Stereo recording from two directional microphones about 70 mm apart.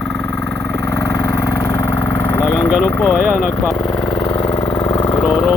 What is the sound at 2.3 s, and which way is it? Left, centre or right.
Speech, centre.